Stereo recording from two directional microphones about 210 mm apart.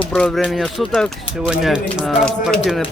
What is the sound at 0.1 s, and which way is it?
Speech, 5° left (ahead or behind).